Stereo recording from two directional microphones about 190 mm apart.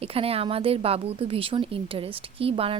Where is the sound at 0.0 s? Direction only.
30° right (ahead or behind).